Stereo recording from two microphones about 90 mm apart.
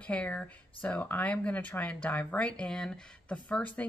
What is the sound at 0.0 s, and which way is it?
Speech, 15° left (ahead or behind).